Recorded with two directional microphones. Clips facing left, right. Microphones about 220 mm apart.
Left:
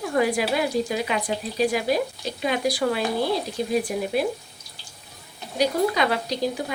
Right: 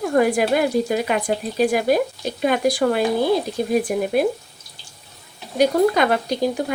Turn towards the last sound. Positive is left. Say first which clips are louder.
# right 5 dB
turn(degrees=-50)  # may be behind; listen again after turning